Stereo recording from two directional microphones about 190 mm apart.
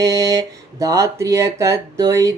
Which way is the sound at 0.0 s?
15° right (ahead or behind).